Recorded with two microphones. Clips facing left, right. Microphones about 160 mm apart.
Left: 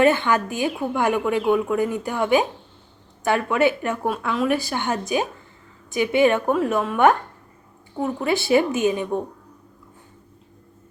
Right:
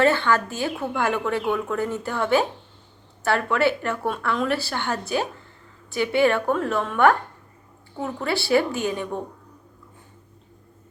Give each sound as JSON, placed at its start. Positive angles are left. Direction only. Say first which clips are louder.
{"t": 0.0, "sound": "a woman's voice", "louder": "left 2 dB", "side_deg": 15}